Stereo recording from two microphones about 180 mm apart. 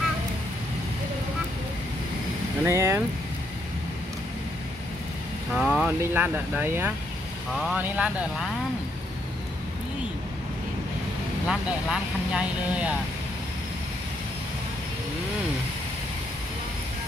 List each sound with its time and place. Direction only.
2.6 s speech: 15° right (ahead or behind)
5.5 s vehicle: centre (ahead or behind)
6.1 s speech: 10° right (ahead or behind)
11.4 s speech: 5° right (ahead or behind)